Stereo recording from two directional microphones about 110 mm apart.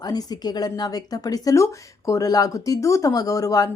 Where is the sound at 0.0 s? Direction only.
35° left (ahead or behind).